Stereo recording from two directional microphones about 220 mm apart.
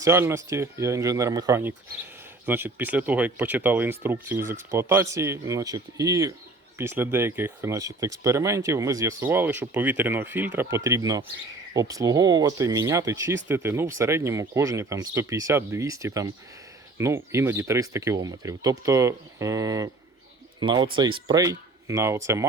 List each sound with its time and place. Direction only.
0.0 s speech: 10° right (ahead or behind)